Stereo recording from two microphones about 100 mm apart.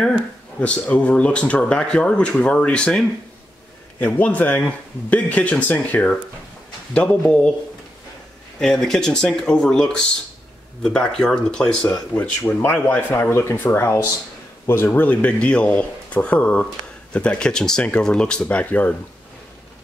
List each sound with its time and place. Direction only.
0.0 s speech: 10° left (ahead or behind)
8.5 s speech: 5° left (ahead or behind)